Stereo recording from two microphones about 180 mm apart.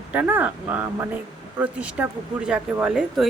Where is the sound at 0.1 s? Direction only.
10° right (ahead or behind).